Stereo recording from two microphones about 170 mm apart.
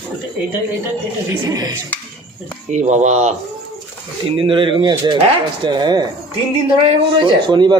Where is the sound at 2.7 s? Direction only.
45° right (ahead or behind).